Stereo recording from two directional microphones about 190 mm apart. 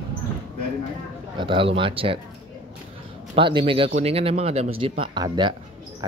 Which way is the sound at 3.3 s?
25° right (ahead or behind).